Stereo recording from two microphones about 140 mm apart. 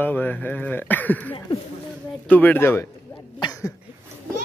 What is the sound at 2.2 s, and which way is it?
Speech, 10° left (ahead or behind).